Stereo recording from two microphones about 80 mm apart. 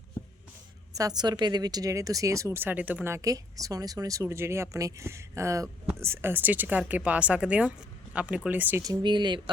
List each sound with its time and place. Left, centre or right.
0.2 s a sound: left
0.9 s speech: right
3.1 s speech: right
9.0 s speech: right